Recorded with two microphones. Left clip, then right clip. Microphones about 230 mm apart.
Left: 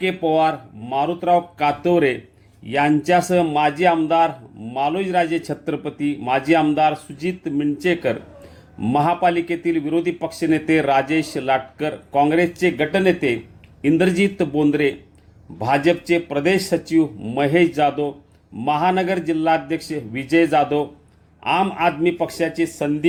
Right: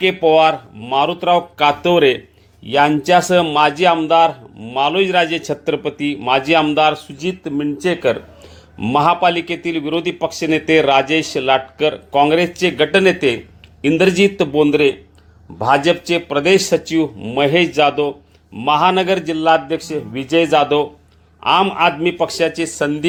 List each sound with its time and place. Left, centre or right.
0.0 s speech: centre
9.0 s speech: centre